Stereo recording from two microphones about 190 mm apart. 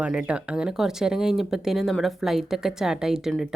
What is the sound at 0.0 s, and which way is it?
Speech, 5° right (ahead or behind).